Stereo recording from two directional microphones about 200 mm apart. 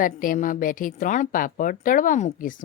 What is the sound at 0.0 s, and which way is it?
Speech, 45° left (ahead or behind).